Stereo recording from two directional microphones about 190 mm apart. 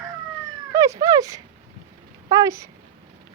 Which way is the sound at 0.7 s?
15° right (ahead or behind).